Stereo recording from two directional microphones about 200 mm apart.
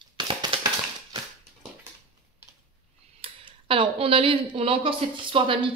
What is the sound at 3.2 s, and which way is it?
Speech, 25° right (ahead or behind).